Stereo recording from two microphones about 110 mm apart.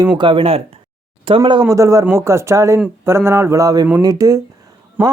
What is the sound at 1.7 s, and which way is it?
Mantra, 30° right (ahead or behind).